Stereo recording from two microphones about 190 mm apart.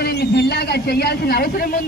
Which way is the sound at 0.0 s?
55° left (ahead or behind).